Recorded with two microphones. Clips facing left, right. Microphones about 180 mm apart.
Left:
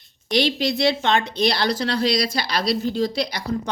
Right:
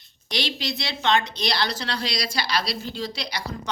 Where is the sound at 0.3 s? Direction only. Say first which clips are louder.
Left 8 dB; 50° left (ahead or behind).